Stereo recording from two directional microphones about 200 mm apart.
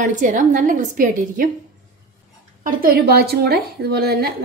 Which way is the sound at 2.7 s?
50° right (ahead or behind).